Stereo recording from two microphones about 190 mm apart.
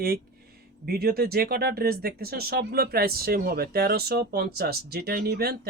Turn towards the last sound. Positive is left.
turn(degrees=-55)  # may be behind; listen again after turning